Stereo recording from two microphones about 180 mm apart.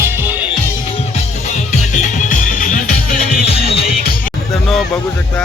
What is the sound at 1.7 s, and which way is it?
Music, 45° left (ahead or behind).